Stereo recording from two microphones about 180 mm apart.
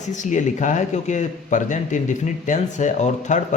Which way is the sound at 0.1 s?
45° left (ahead or behind).